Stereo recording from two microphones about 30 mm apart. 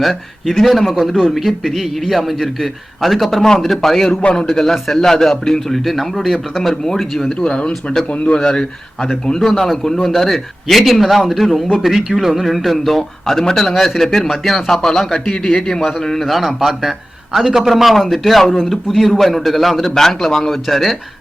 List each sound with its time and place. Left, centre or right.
0.0 s a man's voice: centre
3.8 s a man's voice: centre
7.4 s speech: left
8.1 s speech: left
8.4 s speech: left
9.4 s a man's voice: centre
11.8 s a man's voice: centre
16.2 s a man's voice: centre
19.8 s a man's voice: centre